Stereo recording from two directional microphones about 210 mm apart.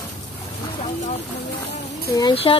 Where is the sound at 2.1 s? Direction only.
20° left (ahead or behind).